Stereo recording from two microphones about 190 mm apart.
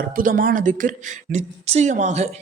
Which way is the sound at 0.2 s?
45° right (ahead or behind).